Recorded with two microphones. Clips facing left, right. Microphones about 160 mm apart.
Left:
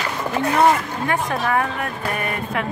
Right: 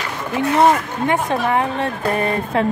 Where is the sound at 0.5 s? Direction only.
25° right (ahead or behind).